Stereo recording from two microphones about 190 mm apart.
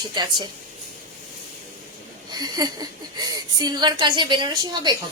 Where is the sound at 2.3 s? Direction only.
20° right (ahead or behind).